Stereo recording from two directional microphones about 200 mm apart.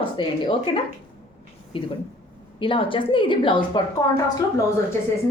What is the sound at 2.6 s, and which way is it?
A woman's voice, 25° left (ahead or behind).